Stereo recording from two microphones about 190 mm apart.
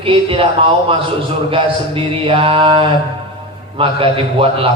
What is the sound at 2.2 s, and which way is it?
A man's voice, 30° right (ahead or behind).